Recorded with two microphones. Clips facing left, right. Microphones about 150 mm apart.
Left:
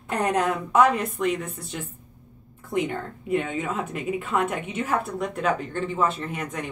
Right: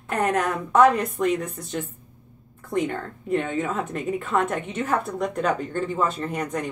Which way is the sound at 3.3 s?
5° left (ahead or behind).